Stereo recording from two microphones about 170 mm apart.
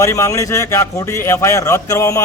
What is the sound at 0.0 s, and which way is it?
A man's voice, 15° left (ahead or behind).